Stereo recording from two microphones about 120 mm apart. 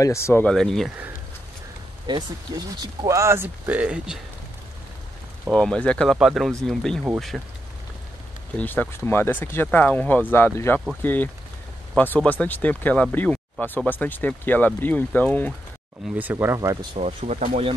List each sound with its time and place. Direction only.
0.0 s speech: 25° left (ahead or behind)
0.5 s speech: 5° left (ahead or behind)
2.0 s speech: 35° right (ahead or behind); by 4.2 s 10° right (ahead or behind)
5.5 s speech: 5° left (ahead or behind)
6.1 s speech: 5° right (ahead or behind)
8.5 s speech: 15° left (ahead or behind)
16.2 s speech: 15° right (ahead or behind)
16.9 s speech: 70° right (ahead or behind)